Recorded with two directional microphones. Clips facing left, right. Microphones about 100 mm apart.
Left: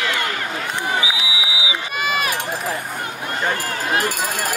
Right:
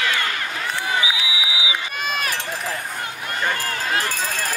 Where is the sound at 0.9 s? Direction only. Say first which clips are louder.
Left 1 dB; 20° left (ahead or behind).